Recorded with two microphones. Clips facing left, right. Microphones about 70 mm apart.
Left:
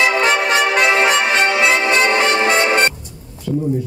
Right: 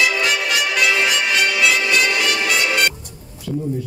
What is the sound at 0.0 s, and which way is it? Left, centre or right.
Music, left.